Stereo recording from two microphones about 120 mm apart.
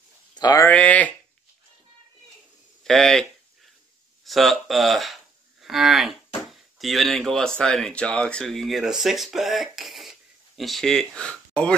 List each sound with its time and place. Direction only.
0.3 s a sound: 35° left (ahead or behind)
0.7 s speech: 10° left (ahead or behind)
2.8 s speech: 5° left (ahead or behind)
5.6 s cattle: centre (ahead or behind)